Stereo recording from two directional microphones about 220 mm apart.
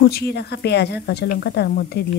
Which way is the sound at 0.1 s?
50° left (ahead or behind).